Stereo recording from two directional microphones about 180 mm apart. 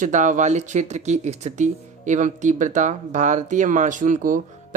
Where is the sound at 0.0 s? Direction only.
45° right (ahead or behind).